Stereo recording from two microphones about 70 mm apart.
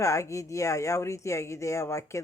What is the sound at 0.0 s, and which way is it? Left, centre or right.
A woman's voice, left.